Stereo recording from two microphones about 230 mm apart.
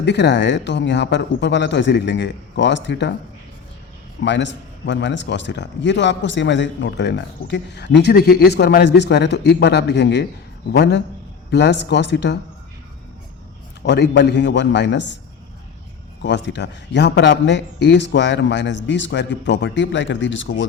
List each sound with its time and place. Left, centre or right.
0.0 s a man's voice: left
4.2 s a man's voice: left
13.8 s a man's voice: left
16.2 s a man's voice: left